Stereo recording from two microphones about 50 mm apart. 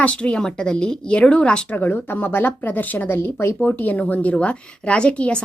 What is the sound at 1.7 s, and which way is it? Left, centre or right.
Speech, left.